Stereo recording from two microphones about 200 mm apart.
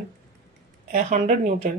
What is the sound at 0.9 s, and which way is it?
Speech, 40° right (ahead or behind).